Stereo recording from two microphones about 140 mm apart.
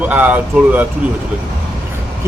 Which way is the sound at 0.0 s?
10° right (ahead or behind).